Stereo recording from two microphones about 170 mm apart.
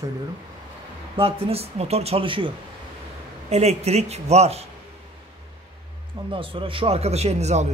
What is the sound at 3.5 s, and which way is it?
Speech, 40° right (ahead or behind).